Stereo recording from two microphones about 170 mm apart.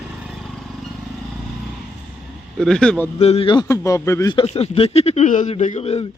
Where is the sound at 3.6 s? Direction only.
15° left (ahead or behind).